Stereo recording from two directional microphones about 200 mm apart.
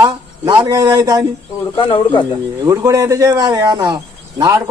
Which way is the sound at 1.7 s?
25° left (ahead or behind).